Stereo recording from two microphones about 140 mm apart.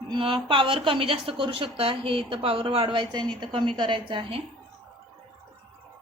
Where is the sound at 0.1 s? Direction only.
35° right (ahead or behind).